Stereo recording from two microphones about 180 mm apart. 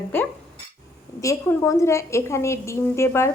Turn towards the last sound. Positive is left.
turn(degrees=15)  # may be behind; listen again after turning